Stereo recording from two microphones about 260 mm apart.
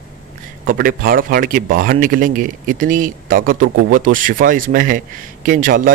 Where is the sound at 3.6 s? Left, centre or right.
Right.